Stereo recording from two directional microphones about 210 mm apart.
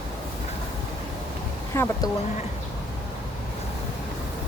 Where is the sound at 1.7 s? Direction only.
15° left (ahead or behind).